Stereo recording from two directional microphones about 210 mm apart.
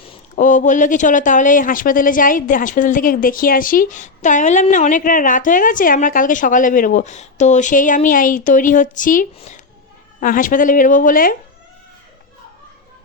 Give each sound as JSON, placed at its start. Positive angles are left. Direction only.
{"t": 0.3, "sound": "speech", "side_deg": 35}